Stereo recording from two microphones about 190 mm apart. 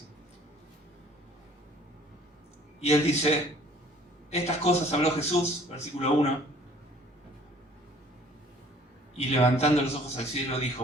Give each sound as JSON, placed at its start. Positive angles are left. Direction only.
{"t": 2.8, "sound": "a man's voice", "side_deg": 35}
{"t": 9.1, "sound": "a man's voice", "side_deg": 35}